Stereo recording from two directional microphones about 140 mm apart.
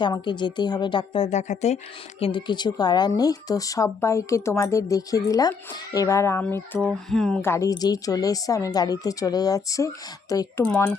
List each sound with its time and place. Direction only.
0.0 s a woman's voice: 35° left (ahead or behind)
1.3 s a woman's voice: 55° left (ahead or behind); by 6.6 s 15° left (ahead or behind)
6.7 s a sound: centre (ahead or behind)
7.4 s a woman's voice: 20° left (ahead or behind)